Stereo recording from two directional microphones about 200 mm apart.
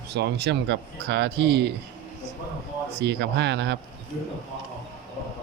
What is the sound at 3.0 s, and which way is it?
Speech, 60° right (ahead or behind).